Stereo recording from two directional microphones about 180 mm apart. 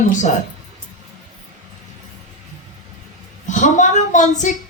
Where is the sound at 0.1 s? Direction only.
45° left (ahead or behind).